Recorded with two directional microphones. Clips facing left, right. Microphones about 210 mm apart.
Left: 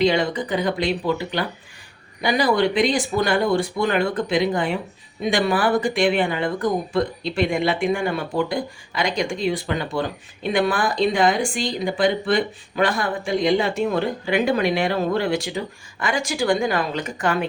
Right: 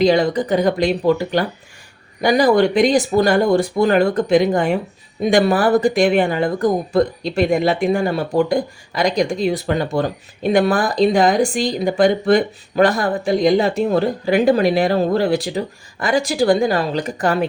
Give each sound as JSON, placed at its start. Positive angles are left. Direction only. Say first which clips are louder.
{"t": 0.0, "sound": "speech", "louder": "right 5 dB", "side_deg": -40}